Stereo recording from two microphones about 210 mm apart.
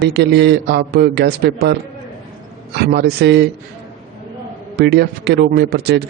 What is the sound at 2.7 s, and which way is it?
Speech, 50° right (ahead or behind).